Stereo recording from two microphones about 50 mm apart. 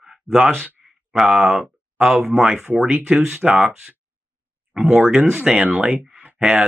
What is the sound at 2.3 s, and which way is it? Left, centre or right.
Speech, right.